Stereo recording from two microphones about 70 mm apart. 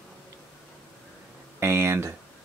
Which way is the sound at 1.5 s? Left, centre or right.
Right.